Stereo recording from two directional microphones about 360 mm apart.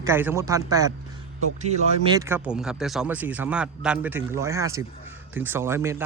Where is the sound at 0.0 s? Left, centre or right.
Centre.